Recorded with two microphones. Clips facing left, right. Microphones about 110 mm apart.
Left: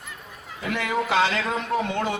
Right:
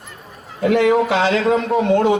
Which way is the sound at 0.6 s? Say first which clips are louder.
Right 12 dB; 65° right (ahead or behind).